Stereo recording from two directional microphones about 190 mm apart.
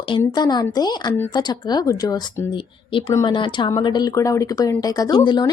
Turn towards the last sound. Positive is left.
turn(degrees=25)  # may be behind; listen again after turning